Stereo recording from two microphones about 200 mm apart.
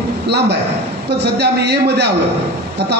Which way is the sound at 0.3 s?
55° right (ahead or behind).